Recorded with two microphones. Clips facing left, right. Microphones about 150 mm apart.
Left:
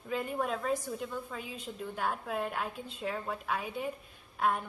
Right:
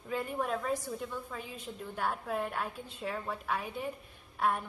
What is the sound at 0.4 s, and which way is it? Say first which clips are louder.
A woman's voice: left 1 dB; centre (ahead or behind).